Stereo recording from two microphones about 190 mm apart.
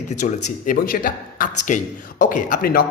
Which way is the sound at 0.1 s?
40° left (ahead or behind).